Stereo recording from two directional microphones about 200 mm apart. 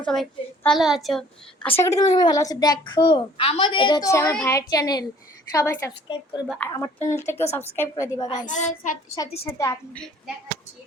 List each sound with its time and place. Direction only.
0.0 s a child's voice: 5° left (ahead or behind)
1.8 s a child's voice: 15° left (ahead or behind)
8.4 s child singing: 35° left (ahead or behind)
9.5 s a woman's voice: 15° left (ahead or behind)